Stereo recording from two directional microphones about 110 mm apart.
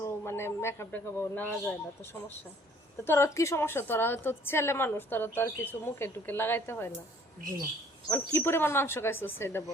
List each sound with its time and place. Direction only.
0.0 s a man's voice: 25° left (ahead or behind)
3.0 s a woman's voice: 25° left (ahead or behind)
8.1 s a woman's voice: 20° left (ahead or behind)